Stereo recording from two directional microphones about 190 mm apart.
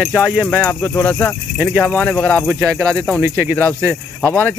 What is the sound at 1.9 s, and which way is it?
Speech, 10° left (ahead or behind).